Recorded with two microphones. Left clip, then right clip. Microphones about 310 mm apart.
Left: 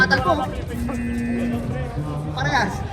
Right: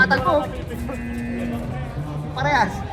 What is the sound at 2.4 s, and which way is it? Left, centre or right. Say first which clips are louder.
Music: right 2 dB; centre.